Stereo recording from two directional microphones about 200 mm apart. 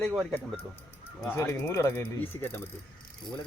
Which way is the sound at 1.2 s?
15° left (ahead or behind).